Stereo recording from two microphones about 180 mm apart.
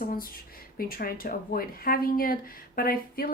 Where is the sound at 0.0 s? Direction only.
50° left (ahead or behind).